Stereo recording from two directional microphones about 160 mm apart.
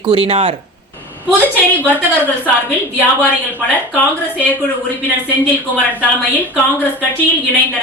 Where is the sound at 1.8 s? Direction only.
10° left (ahead or behind).